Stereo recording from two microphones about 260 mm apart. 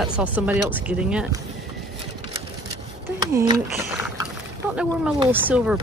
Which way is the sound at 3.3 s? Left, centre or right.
Centre.